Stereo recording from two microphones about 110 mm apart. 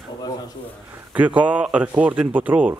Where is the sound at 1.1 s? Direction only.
15° right (ahead or behind).